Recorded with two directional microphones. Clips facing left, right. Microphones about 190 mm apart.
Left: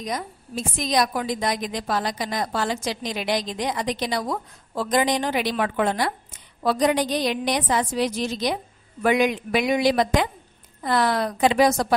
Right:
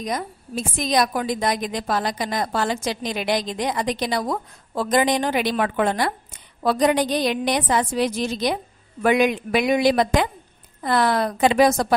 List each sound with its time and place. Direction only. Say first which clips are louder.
0.0 s a woman's voice: right 2 dB; 55° right (ahead or behind)